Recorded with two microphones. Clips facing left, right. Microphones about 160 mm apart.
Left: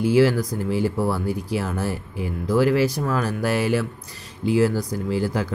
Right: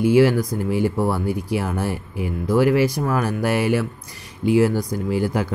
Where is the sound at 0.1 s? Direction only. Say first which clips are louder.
Right 1 dB; 15° right (ahead or behind).